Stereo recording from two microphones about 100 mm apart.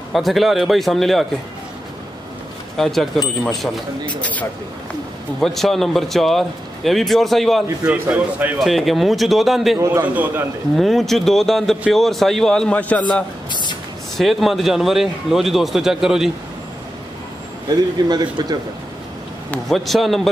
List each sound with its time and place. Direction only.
0.1 s speech: centre (ahead or behind)
2.8 s speech: 5° left (ahead or behind)
4.2 s speech: 15° left (ahead or behind)
5.4 s speech: centre (ahead or behind)
7.8 s a man's voice: 15° right (ahead or behind)
8.5 s speech: centre (ahead or behind)
10.0 s a man's voice: 15° right (ahead or behind)
10.8 s speech: centre (ahead or behind)
13.5 s spray: 50° left (ahead or behind)
14.1 s speech: centre (ahead or behind)
18.0 s speech: 40° right (ahead or behind)
19.7 s speech: centre (ahead or behind)